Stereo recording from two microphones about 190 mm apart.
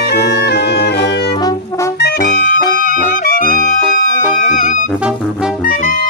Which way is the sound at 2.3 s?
45° left (ahead or behind).